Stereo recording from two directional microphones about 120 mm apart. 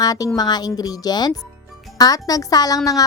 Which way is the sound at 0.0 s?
30° left (ahead or behind).